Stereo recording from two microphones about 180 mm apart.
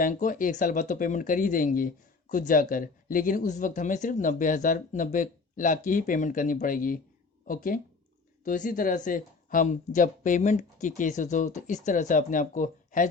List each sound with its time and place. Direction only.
0.0 s speech: 45° left (ahead or behind)